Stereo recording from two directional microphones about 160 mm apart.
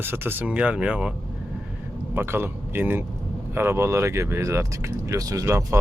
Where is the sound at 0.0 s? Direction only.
15° right (ahead or behind).